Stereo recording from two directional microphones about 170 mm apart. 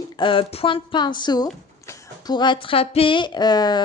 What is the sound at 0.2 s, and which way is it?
Speech, 30° left (ahead or behind).